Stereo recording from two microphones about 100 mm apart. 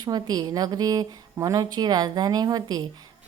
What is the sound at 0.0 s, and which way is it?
A woman's voice, 40° right (ahead or behind).